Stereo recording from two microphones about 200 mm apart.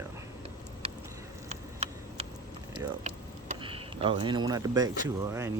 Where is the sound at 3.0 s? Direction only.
30° right (ahead or behind); by 5.5 s 15° right (ahead or behind).